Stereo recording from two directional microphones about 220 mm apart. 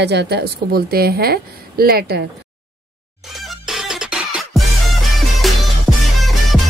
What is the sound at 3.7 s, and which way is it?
Music, centre (ahead or behind).